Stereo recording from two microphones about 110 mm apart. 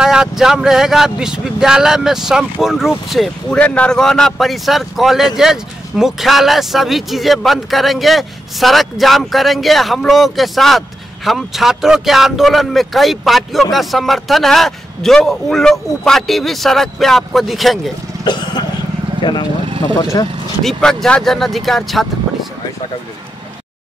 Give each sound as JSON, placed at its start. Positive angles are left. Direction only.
{"t": 0.0, "sound": "a man's voice", "side_deg": -5}
{"t": 3.5, "sound": "a man's voice", "side_deg": 10}
{"t": 18.2, "sound": "vehicle", "side_deg": 40}
{"t": 19.2, "sound": "speech", "side_deg": 45}
{"t": 20.6, "sound": "speech", "side_deg": 5}